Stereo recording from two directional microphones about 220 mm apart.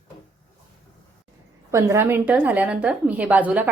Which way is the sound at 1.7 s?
10° right (ahead or behind).